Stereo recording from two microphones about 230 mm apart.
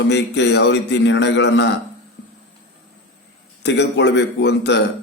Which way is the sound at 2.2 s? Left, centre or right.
Left.